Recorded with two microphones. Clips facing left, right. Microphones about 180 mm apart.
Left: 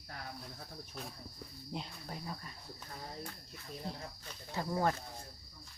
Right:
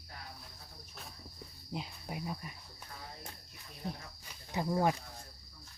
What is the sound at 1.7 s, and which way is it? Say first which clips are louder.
Cricket: right 2 dB; 10° right (ahead or behind).